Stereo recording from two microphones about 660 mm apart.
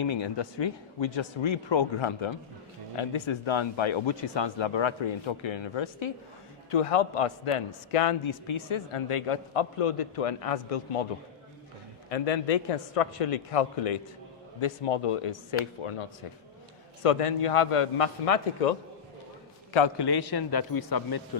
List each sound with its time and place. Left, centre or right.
0.0 s speech: left
6.7 s speech: left
12.0 s a man's voice: left
19.7 s a man's voice: left